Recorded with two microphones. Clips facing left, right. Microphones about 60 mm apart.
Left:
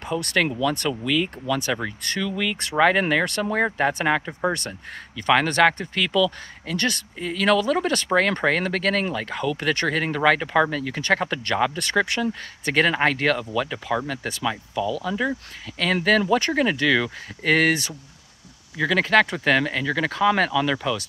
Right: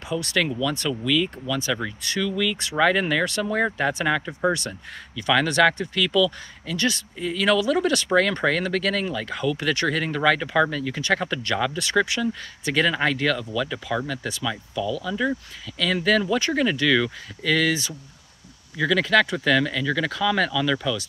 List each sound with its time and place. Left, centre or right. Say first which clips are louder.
0.1 s speech: left 1 dB; left
11.8 s speech: even; left
14.0 s speech: even; left
14.4 s speech: left 4 dB; left
15.6 s speech: left 1 dB; left
18.8 s speech: left 1 dB; left